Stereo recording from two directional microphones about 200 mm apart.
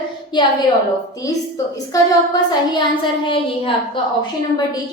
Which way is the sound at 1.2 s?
15° left (ahead or behind).